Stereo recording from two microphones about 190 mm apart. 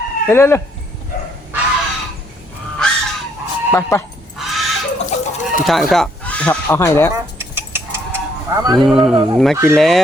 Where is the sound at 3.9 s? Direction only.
15° left (ahead or behind).